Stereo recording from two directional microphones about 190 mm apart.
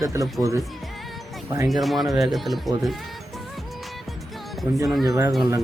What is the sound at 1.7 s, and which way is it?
Speech, centre (ahead or behind).